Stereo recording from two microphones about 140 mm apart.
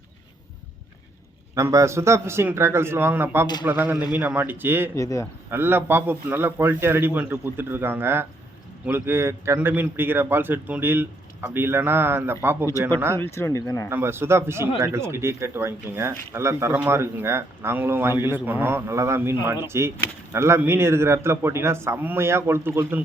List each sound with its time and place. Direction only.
1.5 s a man's voice: 20° right (ahead or behind)
3.4 s a man's voice: 30° left (ahead or behind)
3.7 s a man's voice: 15° right (ahead or behind)
4.9 s speech: 20° left (ahead or behind)
5.5 s a man's voice: 15° right (ahead or behind)
13.1 s speech: 15° left (ahead or behind)
13.9 s a man's voice: 15° right (ahead or behind)